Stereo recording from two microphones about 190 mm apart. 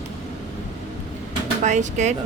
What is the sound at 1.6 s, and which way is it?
Speech, 40° right (ahead or behind).